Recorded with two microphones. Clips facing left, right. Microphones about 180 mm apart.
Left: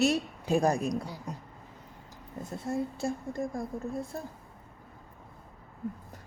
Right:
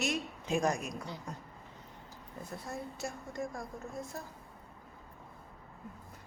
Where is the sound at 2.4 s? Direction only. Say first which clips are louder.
Left 9 dB; 25° left (ahead or behind).